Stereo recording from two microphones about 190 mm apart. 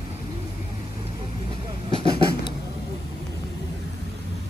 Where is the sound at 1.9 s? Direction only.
30° right (ahead or behind).